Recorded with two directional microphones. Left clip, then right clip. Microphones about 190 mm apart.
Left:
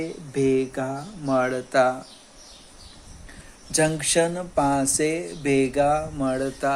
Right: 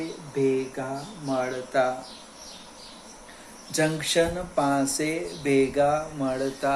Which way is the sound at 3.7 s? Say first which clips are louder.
Left 2 dB; 50° left (ahead or behind).